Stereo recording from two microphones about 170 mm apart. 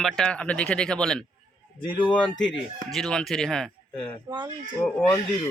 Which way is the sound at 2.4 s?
Centre (ahead or behind).